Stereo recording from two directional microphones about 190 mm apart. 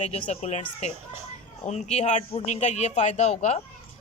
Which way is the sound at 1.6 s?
35° left (ahead or behind).